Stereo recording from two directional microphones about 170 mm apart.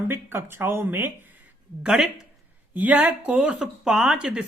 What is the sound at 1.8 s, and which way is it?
A man's voice, centre (ahead or behind).